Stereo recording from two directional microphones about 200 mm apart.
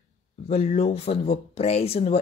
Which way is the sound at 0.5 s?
30° left (ahead or behind).